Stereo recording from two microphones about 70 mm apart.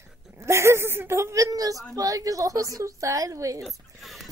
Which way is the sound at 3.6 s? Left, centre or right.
Centre.